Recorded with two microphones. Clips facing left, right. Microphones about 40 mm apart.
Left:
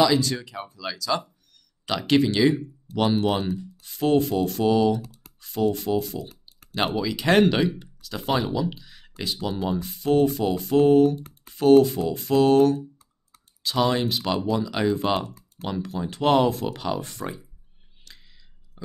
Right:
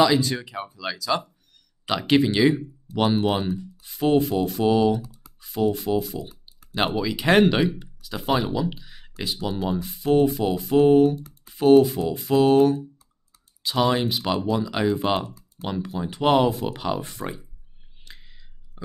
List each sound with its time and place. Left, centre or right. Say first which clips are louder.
0.0 s speech: right 1 dB; centre
4.7 s speech: right 1 dB; right
5.0 s computer keyboard: even; left
5.4 s speech: right 1 dB; centre
18.0 s a sound: right 3 dB; right